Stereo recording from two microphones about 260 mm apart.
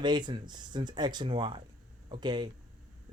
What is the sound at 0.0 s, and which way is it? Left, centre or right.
Speech, centre.